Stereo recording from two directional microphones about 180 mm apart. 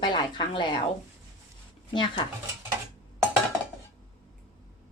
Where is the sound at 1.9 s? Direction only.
30° left (ahead or behind).